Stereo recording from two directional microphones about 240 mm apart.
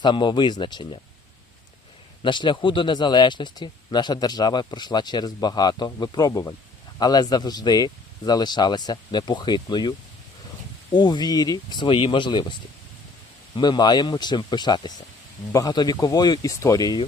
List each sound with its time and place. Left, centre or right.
0.0 s speech: centre
2.2 s speech: centre
10.9 s speech: centre
13.6 s speech: centre